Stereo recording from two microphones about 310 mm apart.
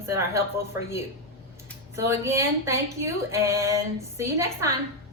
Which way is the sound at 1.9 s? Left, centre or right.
Centre.